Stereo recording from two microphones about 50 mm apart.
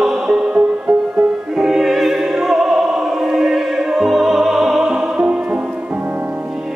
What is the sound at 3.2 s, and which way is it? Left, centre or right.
Opera, centre.